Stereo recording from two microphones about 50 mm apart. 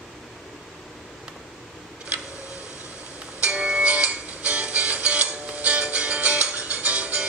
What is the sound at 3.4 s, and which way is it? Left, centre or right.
Music, right.